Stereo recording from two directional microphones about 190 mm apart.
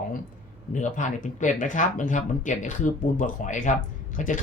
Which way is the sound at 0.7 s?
40° left (ahead or behind).